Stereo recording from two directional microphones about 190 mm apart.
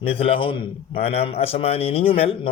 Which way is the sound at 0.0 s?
30° left (ahead or behind).